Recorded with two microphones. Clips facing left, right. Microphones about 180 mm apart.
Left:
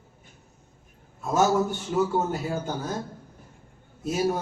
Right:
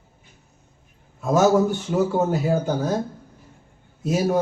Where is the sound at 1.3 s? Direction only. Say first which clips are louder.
Right 5 dB; 50° right (ahead or behind).